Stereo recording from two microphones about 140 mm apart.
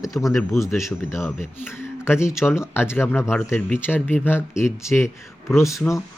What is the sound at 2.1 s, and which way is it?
A man's voice, 20° left (ahead or behind).